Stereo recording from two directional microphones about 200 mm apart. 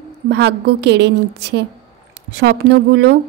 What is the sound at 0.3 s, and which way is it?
A woman's voice, 55° right (ahead or behind).